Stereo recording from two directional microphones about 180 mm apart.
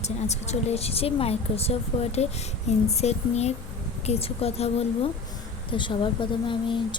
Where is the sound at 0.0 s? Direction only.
35° left (ahead or behind).